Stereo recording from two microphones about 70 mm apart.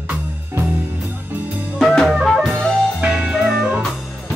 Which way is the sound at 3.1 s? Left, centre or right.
Centre.